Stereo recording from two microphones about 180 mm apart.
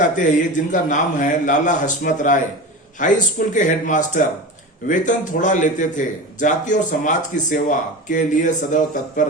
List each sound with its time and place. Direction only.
0.0 s a man's voice: 45° left (ahead or behind)